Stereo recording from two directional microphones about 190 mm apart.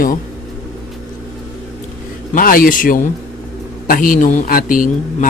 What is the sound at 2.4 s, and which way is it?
Speech, 50° left (ahead or behind).